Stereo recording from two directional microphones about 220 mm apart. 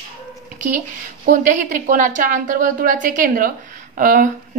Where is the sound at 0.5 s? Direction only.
35° right (ahead or behind).